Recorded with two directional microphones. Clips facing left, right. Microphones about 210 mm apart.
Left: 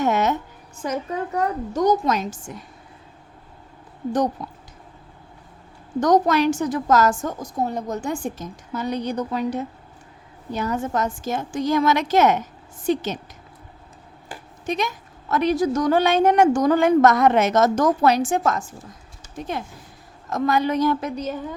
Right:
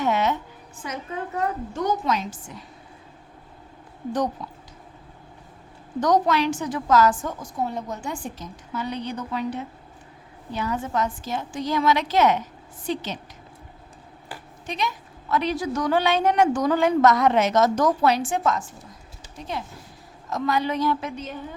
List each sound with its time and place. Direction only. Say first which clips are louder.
0.0 s music: left 2 dB; 45° left (ahead or behind)
0.8 s a woman's voice: left 6 dB; 40° left (ahead or behind)
4.4 s a woman's voice: left 3 dB; 45° left (ahead or behind)
6.0 s a woman's voice: left 3 dB; 45° left (ahead or behind)
14.7 s a woman's voice: left 4 dB; 45° left (ahead or behind)